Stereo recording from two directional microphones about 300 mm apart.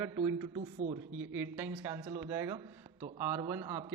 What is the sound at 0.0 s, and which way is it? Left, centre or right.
A man's voice, centre.